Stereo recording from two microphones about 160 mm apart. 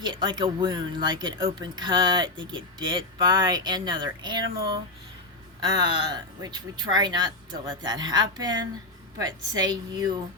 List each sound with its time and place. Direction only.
0.0 s speech: 30° right (ahead or behind)